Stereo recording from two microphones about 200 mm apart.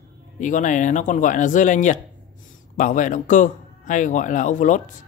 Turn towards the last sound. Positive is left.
turn(degrees=40)  # may be behind; listen again after turning